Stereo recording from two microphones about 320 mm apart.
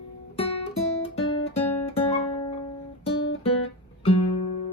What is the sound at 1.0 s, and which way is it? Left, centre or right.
Guitar, centre.